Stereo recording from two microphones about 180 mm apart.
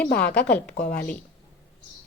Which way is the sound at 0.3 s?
5° left (ahead or behind).